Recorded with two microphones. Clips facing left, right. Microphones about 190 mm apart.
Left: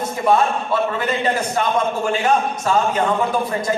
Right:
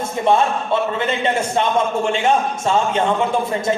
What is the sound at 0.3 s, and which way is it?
A man's voice, 25° right (ahead or behind).